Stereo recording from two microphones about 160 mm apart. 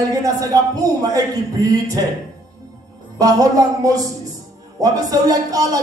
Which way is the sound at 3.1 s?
20° right (ahead or behind).